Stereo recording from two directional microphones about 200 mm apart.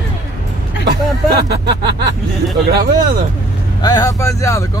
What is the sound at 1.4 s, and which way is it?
Speech, 55° right (ahead or behind).